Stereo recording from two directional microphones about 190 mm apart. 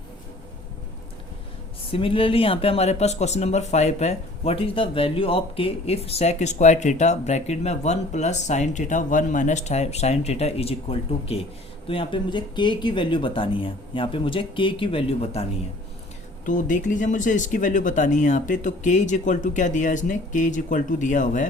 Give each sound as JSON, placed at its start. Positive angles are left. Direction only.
{"t": 1.9, "sound": "speech", "side_deg": 30}
{"t": 16.5, "sound": "speech", "side_deg": 45}